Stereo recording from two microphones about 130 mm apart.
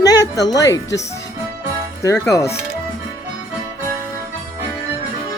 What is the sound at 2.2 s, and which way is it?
Speech, 20° left (ahead or behind).